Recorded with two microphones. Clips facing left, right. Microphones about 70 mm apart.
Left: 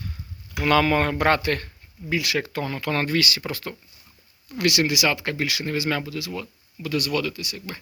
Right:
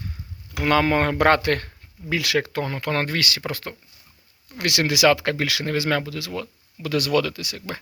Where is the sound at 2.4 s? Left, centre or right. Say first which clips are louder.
Right 1 dB; right.